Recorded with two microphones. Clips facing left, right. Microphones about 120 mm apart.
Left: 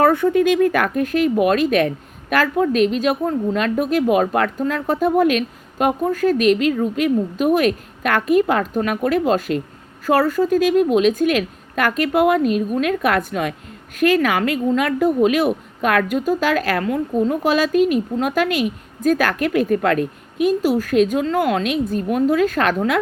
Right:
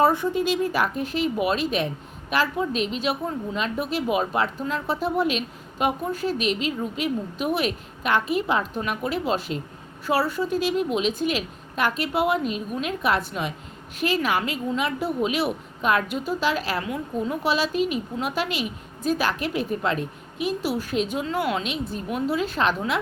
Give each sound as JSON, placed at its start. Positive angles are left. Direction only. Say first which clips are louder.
{"t": 0.0, "sound": "a woman's voice", "louder": "left 6 dB", "side_deg": 55}